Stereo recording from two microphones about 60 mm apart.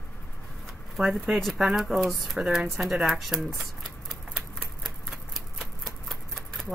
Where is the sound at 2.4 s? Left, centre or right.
Centre.